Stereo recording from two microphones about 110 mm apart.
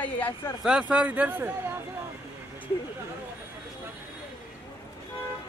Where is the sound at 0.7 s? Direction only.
10° right (ahead or behind).